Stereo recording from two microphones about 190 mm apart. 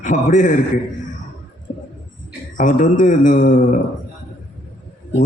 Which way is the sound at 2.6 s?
45° left (ahead or behind).